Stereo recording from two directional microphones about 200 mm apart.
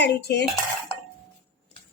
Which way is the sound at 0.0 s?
55° left (ahead or behind).